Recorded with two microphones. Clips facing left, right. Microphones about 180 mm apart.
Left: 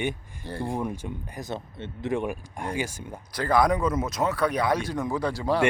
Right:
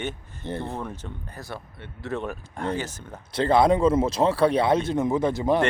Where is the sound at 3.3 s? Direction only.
25° right (ahead or behind).